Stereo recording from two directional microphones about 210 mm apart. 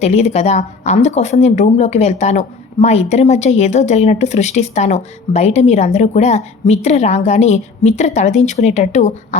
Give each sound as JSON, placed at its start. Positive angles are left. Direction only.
{"t": 0.0, "sound": "speech", "side_deg": 30}